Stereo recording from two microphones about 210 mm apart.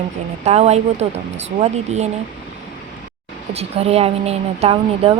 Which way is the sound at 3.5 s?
30° right (ahead or behind).